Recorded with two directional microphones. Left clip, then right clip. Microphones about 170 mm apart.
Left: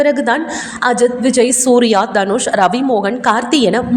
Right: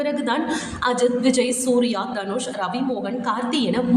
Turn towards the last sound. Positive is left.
turn(degrees=45)  # may be behind; listen again after turning